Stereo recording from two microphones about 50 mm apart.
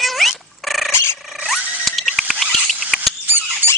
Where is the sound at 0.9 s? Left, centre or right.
Left.